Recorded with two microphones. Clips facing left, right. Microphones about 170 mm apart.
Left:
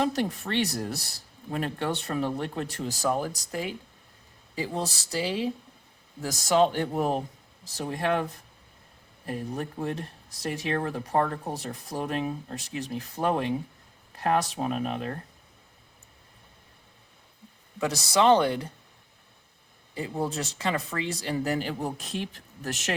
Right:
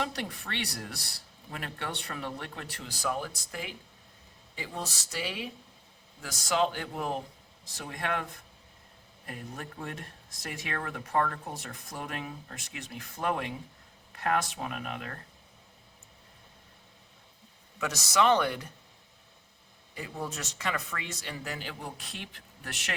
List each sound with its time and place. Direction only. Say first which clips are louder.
0.0 s speech: left 8 dB; 35° left (ahead or behind)
17.7 s speech: left 3 dB; 30° left (ahead or behind)
19.9 s speech: left 7 dB; 30° left (ahead or behind)